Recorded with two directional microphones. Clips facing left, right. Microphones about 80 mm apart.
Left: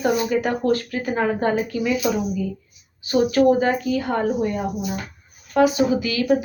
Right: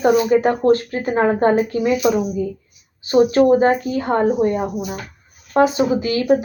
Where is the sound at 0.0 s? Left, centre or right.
Right.